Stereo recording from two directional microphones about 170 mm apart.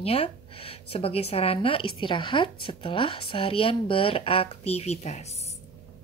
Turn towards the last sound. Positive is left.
turn(degrees=40)  # may be behind; listen again after turning